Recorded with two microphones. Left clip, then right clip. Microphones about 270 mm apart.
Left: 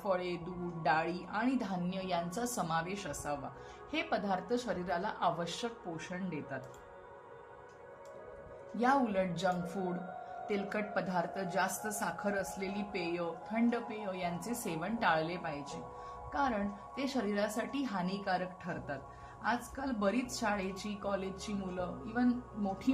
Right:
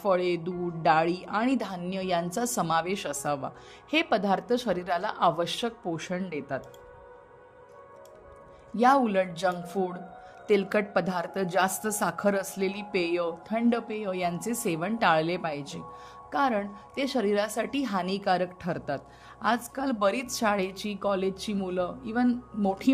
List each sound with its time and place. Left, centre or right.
0.0 s a woman's voice: right
8.8 s a woman's voice: right